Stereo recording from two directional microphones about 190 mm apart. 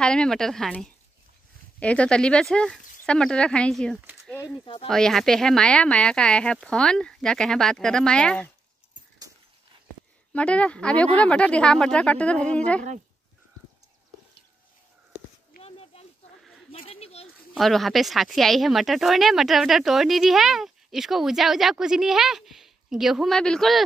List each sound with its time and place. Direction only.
0.0 s speech: 5° left (ahead or behind)
10.3 s speech: 5° left (ahead or behind)
15.6 s a sound: 30° left (ahead or behind)
17.6 s speech: centre (ahead or behind)